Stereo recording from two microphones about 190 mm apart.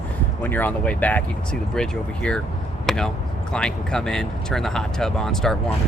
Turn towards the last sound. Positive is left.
turn(degrees=5)  # may be behind; listen again after turning